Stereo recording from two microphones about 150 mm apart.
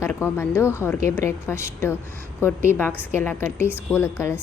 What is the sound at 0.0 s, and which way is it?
A woman's voice, 20° left (ahead or behind).